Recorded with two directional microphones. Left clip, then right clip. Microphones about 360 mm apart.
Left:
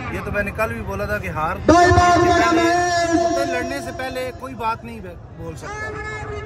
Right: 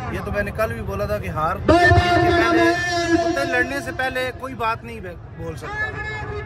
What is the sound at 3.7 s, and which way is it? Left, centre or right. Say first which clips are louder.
A man's voice: right 2 dB; centre.